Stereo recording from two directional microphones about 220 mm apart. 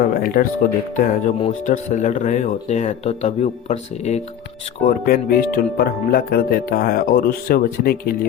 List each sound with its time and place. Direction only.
0.0 s speech: 40° left (ahead or behind)